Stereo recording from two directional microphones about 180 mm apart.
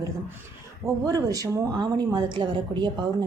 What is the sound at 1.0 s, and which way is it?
A woman's voice, 20° right (ahead or behind).